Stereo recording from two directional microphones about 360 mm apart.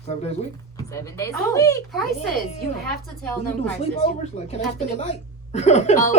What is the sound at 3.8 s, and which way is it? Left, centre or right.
Speech, centre.